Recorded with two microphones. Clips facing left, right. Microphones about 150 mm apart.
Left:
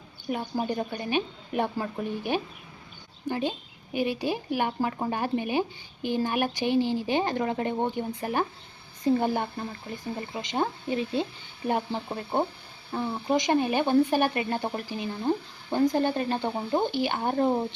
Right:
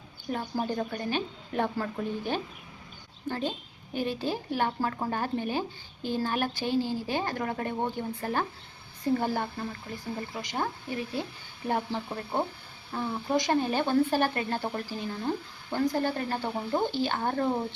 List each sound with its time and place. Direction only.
0.3 s speech: 15° left (ahead or behind)